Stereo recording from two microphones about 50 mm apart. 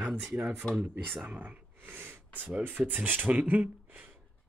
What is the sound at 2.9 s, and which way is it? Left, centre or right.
Speech, right.